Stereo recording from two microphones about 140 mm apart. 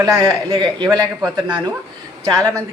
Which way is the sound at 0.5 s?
35° right (ahead or behind).